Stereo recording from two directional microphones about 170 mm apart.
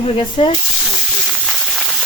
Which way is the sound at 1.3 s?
Centre (ahead or behind).